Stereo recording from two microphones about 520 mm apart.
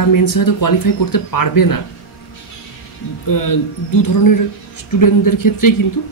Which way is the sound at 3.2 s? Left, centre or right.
Left.